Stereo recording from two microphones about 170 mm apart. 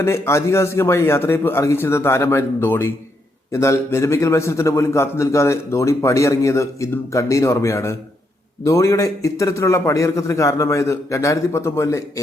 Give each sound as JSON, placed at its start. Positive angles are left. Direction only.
{"t": 0.0, "sound": "a man's voice", "side_deg": 15}